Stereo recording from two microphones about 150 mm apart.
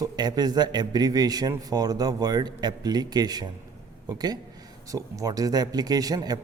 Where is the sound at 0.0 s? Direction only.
25° right (ahead or behind).